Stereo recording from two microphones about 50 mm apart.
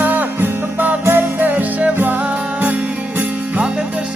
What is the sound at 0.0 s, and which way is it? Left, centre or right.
Music, right.